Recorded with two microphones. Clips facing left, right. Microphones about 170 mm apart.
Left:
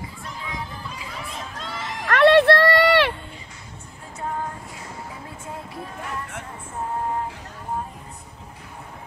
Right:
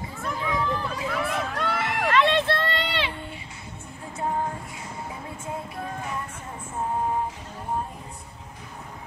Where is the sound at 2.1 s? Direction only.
65° left (ahead or behind).